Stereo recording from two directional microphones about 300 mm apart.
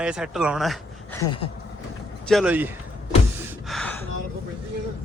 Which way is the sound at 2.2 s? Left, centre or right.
Centre.